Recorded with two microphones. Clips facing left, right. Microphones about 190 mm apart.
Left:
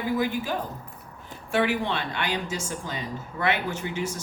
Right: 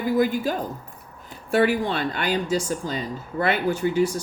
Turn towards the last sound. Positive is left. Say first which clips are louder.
# right 9 dB
turn(degrees=-35)  # may be behind; listen again after turning